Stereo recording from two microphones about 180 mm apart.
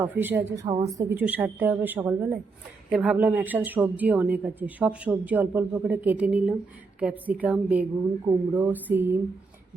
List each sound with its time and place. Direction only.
0.0 s a woman's voice: 10° right (ahead or behind)